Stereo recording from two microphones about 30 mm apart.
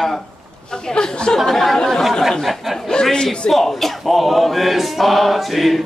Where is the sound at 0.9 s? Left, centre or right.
Left.